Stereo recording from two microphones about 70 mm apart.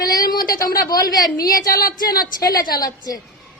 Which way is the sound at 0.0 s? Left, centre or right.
Left.